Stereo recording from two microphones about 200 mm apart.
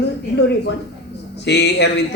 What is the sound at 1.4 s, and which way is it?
Speech, 60° left (ahead or behind).